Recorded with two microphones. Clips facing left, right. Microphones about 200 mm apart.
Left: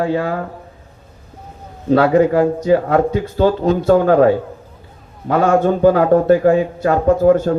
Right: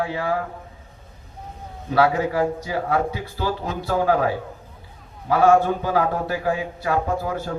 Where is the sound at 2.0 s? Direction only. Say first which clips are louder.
Left 6 dB; 55° left (ahead or behind).